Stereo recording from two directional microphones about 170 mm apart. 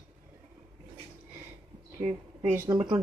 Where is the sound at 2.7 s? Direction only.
25° right (ahead or behind).